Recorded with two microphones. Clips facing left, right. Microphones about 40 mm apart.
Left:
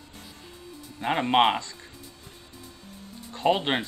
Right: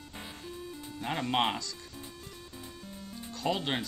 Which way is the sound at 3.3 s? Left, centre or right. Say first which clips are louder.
Left 8 dB; left.